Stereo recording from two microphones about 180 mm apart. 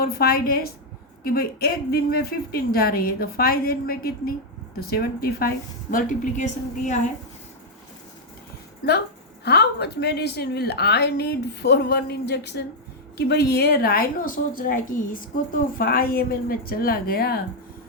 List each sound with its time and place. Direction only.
0.0 s a woman's voice: 60° left (ahead or behind); by 7.0 s 40° left (ahead or behind)
9.4 s a woman's voice: 65° left (ahead or behind)